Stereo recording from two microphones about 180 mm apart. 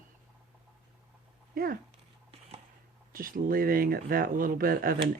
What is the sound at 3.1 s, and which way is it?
Speech, 50° right (ahead or behind).